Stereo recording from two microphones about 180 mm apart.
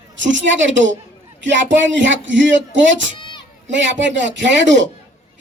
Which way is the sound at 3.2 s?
25° left (ahead or behind).